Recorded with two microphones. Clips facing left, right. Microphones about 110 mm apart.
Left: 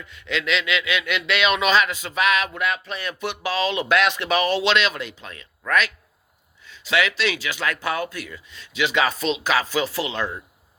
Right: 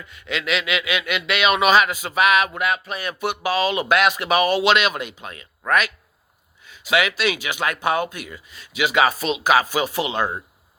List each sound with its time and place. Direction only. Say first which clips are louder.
0.1 s speech: even; 5° right (ahead or behind)
6.7 s speech: right 2 dB; 10° right (ahead or behind)
8.4 s speech: right 1 dB; 5° right (ahead or behind)